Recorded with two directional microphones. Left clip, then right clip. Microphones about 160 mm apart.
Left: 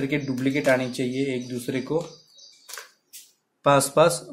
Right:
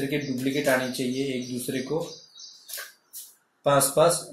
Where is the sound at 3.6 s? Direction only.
25° left (ahead or behind).